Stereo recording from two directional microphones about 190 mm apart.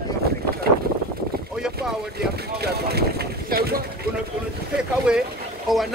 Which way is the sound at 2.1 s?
55° right (ahead or behind).